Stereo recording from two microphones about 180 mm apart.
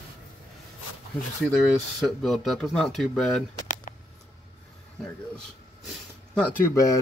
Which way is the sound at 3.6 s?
45° left (ahead or behind).